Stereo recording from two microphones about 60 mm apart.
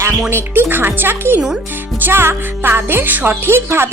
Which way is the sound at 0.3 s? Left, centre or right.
Right.